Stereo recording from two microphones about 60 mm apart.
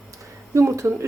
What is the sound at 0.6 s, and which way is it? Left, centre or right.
Speech, right.